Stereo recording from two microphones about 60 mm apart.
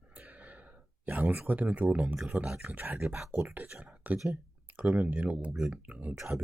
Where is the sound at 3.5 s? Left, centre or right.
Right.